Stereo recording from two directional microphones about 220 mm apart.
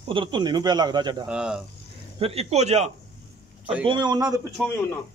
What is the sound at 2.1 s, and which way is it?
A man's voice, 25° right (ahead or behind).